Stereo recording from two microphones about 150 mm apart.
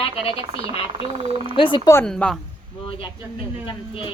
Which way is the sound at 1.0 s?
35° right (ahead or behind).